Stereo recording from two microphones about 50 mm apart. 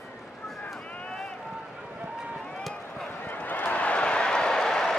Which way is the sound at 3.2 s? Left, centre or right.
Left.